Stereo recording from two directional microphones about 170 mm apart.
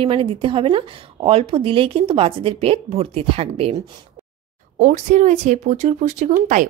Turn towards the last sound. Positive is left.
turn(degrees=-45)  # may be behind; listen again after turning